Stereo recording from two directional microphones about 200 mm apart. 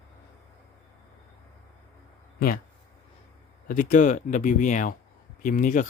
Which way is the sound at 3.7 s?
40° left (ahead or behind).